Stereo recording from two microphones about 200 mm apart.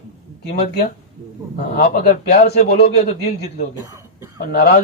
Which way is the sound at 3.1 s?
35° left (ahead or behind).